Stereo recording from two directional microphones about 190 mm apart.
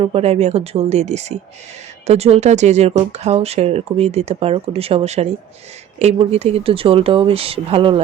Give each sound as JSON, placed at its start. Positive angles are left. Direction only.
{"t": 0.0, "sound": "speech", "side_deg": -30}